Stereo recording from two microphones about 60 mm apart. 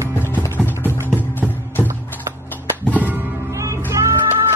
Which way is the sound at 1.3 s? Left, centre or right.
Left.